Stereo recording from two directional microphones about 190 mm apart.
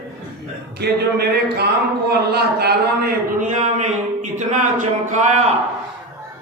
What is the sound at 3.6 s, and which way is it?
Speech, 40° right (ahead or behind).